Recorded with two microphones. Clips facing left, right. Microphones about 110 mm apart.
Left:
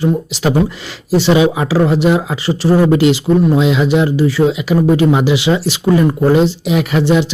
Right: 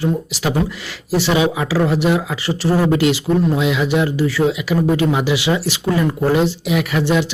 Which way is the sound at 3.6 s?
25° left (ahead or behind).